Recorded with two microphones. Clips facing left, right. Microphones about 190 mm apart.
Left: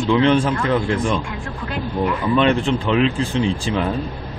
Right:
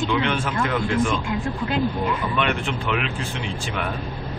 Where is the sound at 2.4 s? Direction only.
30° left (ahead or behind).